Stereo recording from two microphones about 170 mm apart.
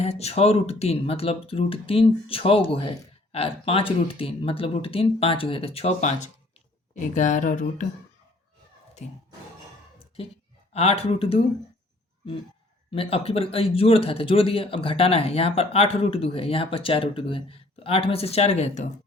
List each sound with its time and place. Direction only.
0.0 s a man's voice: 40° left (ahead or behind)
10.7 s a man's voice: 40° left (ahead or behind)
12.9 s a man's voice: 35° left (ahead or behind)